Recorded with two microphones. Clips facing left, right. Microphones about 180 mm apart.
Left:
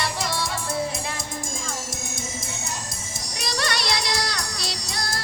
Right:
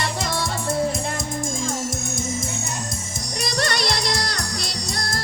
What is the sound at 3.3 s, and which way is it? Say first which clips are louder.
Music: right 3 dB; 50° right (ahead or behind).